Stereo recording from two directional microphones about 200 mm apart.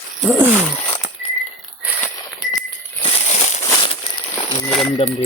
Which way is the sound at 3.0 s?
35° left (ahead or behind).